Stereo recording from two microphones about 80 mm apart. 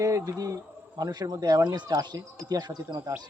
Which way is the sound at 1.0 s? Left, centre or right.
Right.